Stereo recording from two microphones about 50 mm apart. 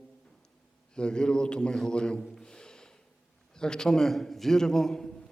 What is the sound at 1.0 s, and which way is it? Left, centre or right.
A man's voice, centre.